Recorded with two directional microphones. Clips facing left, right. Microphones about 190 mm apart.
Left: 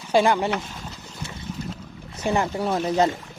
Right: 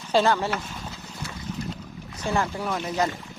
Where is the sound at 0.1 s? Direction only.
15° left (ahead or behind).